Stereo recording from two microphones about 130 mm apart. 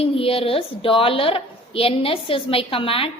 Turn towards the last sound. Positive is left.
turn(degrees=45)  # may be behind; listen again after turning